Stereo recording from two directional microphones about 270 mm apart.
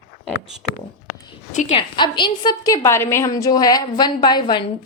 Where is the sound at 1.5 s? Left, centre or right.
Left.